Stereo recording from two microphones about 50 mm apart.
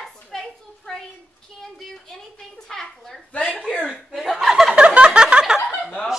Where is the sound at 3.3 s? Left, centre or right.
Left.